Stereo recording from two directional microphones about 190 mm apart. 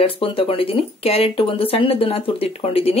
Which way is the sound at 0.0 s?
30° left (ahead or behind).